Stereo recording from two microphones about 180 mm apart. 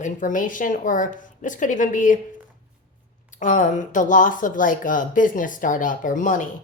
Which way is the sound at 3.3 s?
45° left (ahead or behind).